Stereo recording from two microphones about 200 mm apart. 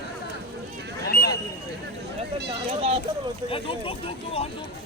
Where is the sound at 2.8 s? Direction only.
30° right (ahead or behind).